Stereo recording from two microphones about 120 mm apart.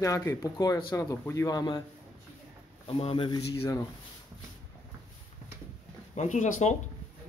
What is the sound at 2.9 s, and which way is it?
Speech, 50° left (ahead or behind).